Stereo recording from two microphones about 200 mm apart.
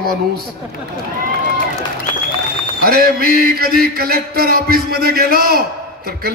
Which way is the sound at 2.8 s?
50° right (ahead or behind).